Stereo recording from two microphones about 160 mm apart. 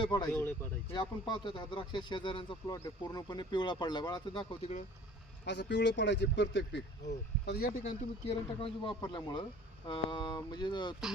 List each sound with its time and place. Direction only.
0.0 s speech: 25° left (ahead or behind)
0.3 s speech: 15° left (ahead or behind)
0.9 s speech: 30° left (ahead or behind)
4.6 s speech: 50° left (ahead or behind)
5.5 s speech: 90° left
7.4 s speech: 75° left (ahead or behind)
8.3 s speech: 35° left (ahead or behind)